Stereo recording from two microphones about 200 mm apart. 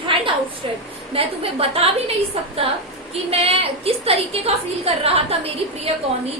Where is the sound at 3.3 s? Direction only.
30° right (ahead or behind).